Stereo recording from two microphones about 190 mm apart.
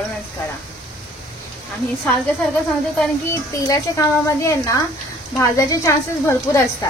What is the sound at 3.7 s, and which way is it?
Speech, 15° left (ahead or behind).